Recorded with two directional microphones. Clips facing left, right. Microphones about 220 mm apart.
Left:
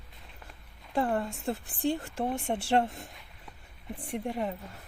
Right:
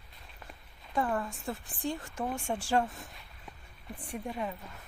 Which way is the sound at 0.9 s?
30° left (ahead or behind).